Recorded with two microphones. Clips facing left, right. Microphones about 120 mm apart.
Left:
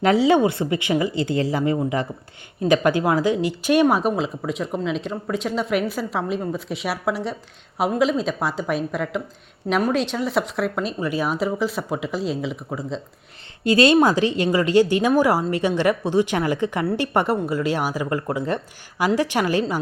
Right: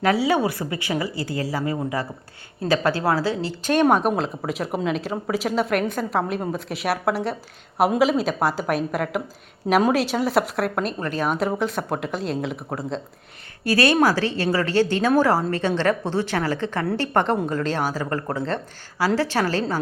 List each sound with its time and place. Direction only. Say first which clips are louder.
0.0 s speech: left 4 dB; 25° left (ahead or behind); by 13.0 s centre (ahead or behind)
13.7 s speech: left 3 dB; 20° left (ahead or behind)